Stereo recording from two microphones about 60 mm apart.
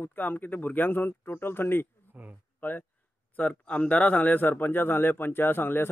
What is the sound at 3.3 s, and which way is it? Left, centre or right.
A man's voice, left.